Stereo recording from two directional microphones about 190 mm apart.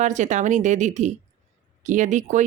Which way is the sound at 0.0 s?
40° right (ahead or behind).